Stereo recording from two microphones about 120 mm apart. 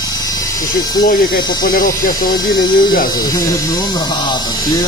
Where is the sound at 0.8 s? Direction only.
35° left (ahead or behind).